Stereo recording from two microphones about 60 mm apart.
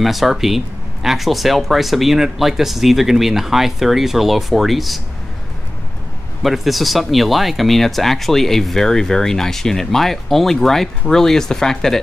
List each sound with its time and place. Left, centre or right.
0.0 s speech: centre
6.4 s speech: centre